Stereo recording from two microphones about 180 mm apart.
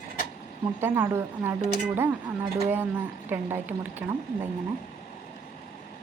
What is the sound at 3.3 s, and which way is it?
Speech, 10° right (ahead or behind).